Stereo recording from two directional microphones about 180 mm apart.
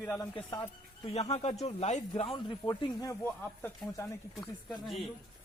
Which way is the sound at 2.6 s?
20° left (ahead or behind).